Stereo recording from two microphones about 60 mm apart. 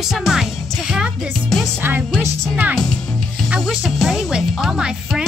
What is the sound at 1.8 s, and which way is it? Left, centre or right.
Speech, right.